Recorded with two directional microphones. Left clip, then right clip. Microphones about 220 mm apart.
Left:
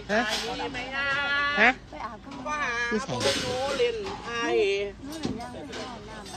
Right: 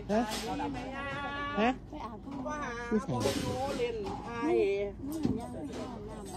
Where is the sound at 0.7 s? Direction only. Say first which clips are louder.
Left 10 dB; 35° right (ahead or behind).